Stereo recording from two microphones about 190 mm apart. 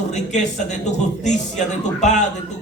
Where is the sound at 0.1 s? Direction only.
40° left (ahead or behind).